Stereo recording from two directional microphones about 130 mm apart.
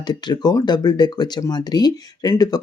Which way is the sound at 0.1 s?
35° left (ahead or behind).